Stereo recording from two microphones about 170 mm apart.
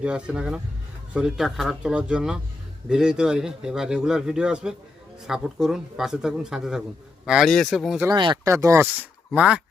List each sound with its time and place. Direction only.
0.0 s a man's voice: 5° right (ahead or behind)
8.0 s speech: 25° right (ahead or behind); by 9.6 s 10° right (ahead or behind)